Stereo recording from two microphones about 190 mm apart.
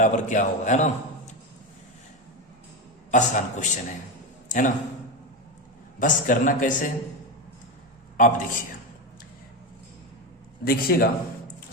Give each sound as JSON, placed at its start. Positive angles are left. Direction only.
{"t": 0.0, "sound": "a man's voice", "side_deg": 40}
{"t": 3.1, "sound": "a man's voice", "side_deg": 40}
{"t": 4.4, "sound": "a sound", "side_deg": 45}
{"t": 6.0, "sound": "a man's voice", "side_deg": 45}
{"t": 8.1, "sound": "a man's voice", "side_deg": 45}
{"t": 10.6, "sound": "a man's voice", "side_deg": 50}